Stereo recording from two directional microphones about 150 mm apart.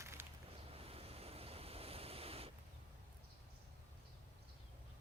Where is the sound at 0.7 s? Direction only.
40° right (ahead or behind).